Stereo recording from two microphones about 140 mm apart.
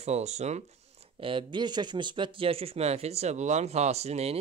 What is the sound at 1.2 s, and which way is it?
Speech, 35° right (ahead or behind).